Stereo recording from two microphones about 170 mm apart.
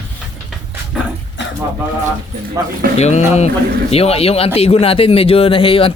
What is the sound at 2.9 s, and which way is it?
Speech, 40° left (ahead or behind).